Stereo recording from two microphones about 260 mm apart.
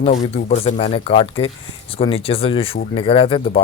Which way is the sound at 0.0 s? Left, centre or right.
Left.